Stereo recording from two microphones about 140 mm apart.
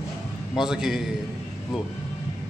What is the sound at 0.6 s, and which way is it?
Speech, 5° right (ahead or behind).